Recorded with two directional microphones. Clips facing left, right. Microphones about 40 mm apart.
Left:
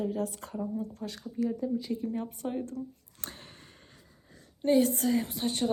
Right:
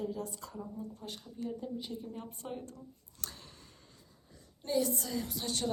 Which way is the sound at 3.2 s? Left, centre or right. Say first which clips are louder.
Left 4 dB; left.